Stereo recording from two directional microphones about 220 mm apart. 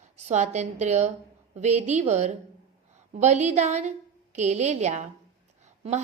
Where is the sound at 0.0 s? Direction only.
30° right (ahead or behind).